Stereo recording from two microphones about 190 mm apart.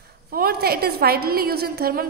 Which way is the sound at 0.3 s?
55° right (ahead or behind).